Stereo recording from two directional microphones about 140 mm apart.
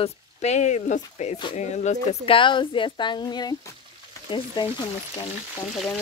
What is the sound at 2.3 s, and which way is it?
A woman's voice, 35° left (ahead or behind).